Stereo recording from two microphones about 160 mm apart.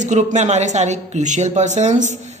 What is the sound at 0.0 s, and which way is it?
A man's voice, 50° right (ahead or behind).